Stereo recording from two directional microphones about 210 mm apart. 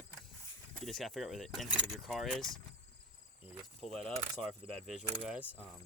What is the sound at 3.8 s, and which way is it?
Speech, centre (ahead or behind).